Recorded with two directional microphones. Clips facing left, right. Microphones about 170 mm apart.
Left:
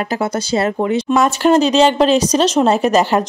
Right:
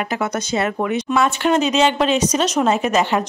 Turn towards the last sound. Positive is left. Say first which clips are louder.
# left 4 dB
turn(degrees=35)  # may be behind; listen again after turning